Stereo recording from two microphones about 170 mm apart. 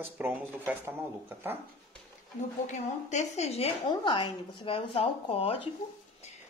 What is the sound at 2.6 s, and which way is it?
A woman's voice, 45° left (ahead or behind).